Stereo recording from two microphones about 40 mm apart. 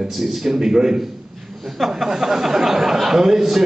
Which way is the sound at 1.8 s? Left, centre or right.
Centre.